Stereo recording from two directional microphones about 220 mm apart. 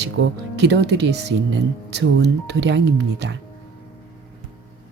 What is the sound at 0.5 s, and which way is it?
Speech, 50° right (ahead or behind).